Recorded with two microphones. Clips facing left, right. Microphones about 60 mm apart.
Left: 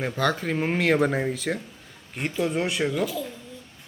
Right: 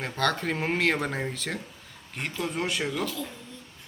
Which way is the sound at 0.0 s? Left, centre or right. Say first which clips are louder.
Left 2 dB; centre.